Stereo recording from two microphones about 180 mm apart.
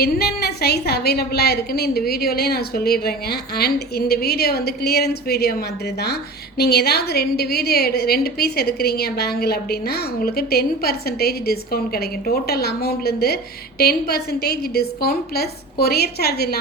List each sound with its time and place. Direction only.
0.0 s a woman's voice: 60° left (ahead or behind)